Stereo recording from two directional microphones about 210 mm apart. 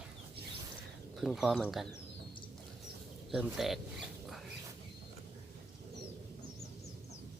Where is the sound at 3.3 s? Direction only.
Centre (ahead or behind).